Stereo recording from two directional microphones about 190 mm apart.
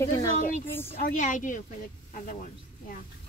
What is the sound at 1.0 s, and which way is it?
A woman's voice, 40° left (ahead or behind).